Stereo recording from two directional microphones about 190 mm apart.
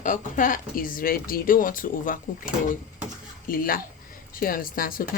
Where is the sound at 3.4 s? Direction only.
50° left (ahead or behind).